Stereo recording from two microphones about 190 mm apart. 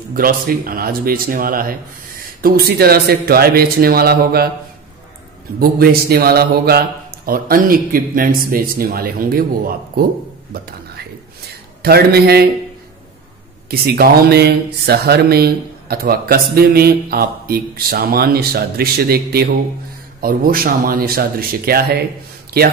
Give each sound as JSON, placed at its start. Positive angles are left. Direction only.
{"t": 0.1, "sound": "speech", "side_deg": -50}
{"t": 5.6, "sound": "speech", "side_deg": -50}
{"t": 10.5, "sound": "whispering", "side_deg": -55}
{"t": 11.8, "sound": "speech", "side_deg": -55}
{"t": 13.7, "sound": "speech", "side_deg": -55}